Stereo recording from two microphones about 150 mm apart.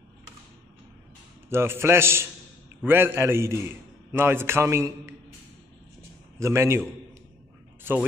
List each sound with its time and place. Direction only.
1.5 s a man's voice: 15° right (ahead or behind)
6.4 s a man's voice: 20° right (ahead or behind)